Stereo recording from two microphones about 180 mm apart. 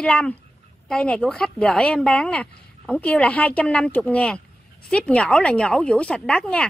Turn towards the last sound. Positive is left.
turn(degrees=5)  # may be behind; listen again after turning